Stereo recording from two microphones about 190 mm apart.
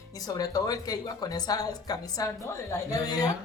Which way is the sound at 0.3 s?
20° left (ahead or behind).